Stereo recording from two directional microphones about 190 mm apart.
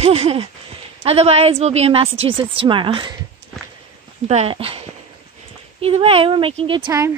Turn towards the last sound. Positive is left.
turn(degrees=-15)  # may be behind; listen again after turning